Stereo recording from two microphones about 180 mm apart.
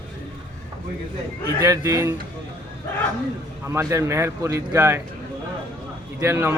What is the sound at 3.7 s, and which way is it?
Speech, 15° right (ahead or behind).